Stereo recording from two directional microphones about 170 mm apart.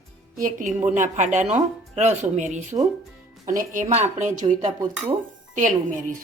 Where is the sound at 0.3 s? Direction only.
50° right (ahead or behind).